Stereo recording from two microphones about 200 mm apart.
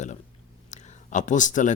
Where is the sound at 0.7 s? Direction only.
35° left (ahead or behind).